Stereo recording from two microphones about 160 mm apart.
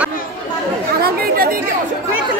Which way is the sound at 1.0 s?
70° right (ahead or behind).